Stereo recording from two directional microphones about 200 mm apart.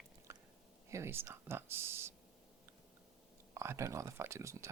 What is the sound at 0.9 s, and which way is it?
Speech, 15° right (ahead or behind).